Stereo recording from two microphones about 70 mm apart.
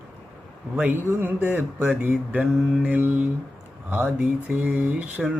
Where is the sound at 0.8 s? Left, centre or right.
Right.